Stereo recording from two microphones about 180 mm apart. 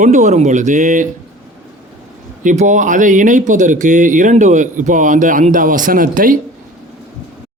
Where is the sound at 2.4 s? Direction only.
45° right (ahead or behind).